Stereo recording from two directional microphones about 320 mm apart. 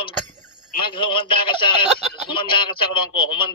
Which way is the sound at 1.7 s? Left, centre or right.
Centre.